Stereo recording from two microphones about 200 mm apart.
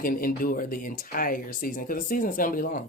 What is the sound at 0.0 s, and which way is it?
Speech, 45° left (ahead or behind).